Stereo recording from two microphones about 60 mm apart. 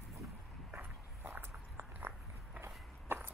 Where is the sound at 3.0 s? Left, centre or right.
Right.